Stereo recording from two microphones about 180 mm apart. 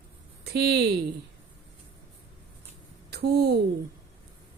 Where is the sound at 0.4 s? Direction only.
60° right (ahead or behind).